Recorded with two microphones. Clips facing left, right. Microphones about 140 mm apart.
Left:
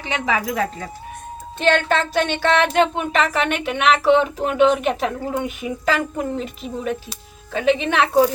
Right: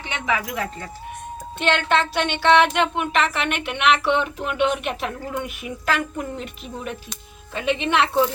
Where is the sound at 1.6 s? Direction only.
40° left (ahead or behind).